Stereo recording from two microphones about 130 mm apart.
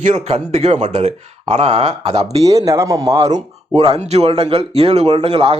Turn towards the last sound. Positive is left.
turn(degrees=-50)  # may be behind; listen again after turning